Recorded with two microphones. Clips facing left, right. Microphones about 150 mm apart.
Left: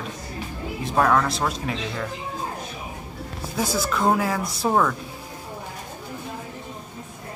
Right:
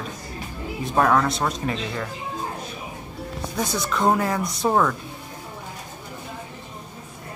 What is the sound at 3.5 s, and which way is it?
Speech, 5° left (ahead or behind).